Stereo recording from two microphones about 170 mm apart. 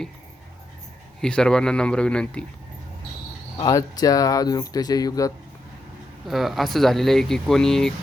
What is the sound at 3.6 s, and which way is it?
Speech, 20° left (ahead or behind).